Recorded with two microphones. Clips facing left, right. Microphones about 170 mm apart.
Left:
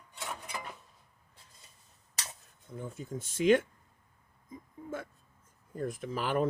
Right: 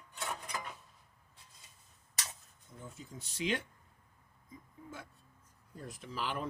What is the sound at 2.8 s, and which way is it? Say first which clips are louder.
Speech: left 9 dB; 55° left (ahead or behind).